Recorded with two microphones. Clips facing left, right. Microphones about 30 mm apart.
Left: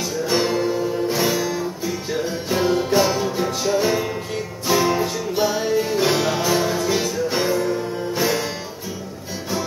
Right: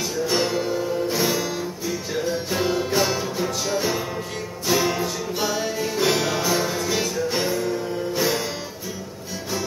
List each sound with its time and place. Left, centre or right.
0.3 s music: centre
4.9 s music: centre
5.4 s music: centre